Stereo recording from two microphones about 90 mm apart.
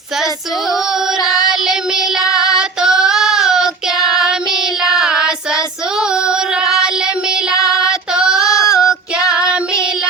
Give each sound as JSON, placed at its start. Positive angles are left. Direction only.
{"t": 1.5, "sound": "child singing", "side_deg": -5}
{"t": 2.2, "sound": "child singing", "side_deg": 40}
{"t": 2.6, "sound": "child singing", "side_deg": -5}
{"t": 4.8, "sound": "child singing", "side_deg": -5}
{"t": 7.5, "sound": "child singing", "side_deg": 40}
{"t": 7.9, "sound": "female singing", "side_deg": -5}
{"t": 8.6, "sound": "female singing", "side_deg": 40}